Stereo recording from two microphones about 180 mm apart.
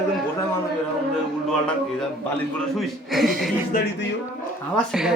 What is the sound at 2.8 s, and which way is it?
Speech, centre (ahead or behind).